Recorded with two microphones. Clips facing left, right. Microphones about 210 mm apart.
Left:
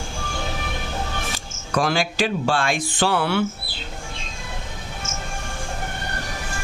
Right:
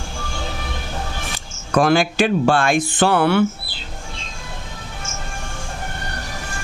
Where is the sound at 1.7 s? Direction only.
55° right (ahead or behind).